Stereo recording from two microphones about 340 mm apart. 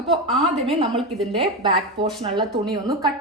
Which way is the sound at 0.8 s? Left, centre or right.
Centre.